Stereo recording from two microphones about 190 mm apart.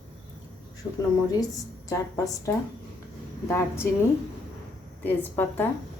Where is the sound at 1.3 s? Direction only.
20° left (ahead or behind).